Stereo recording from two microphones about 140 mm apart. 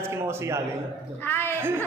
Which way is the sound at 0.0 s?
20° right (ahead or behind).